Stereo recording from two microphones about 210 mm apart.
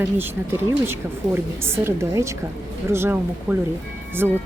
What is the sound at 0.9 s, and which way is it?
A woman's voice, 10° right (ahead or behind).